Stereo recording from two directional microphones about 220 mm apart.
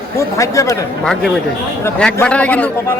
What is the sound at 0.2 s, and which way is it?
Speech, 15° left (ahead or behind).